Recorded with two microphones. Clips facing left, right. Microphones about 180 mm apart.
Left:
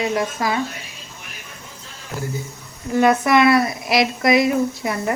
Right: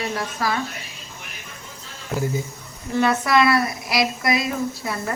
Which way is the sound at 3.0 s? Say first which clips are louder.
Left 3 dB; 20° left (ahead or behind).